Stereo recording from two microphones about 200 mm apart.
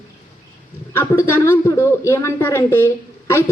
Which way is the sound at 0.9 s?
15° left (ahead or behind).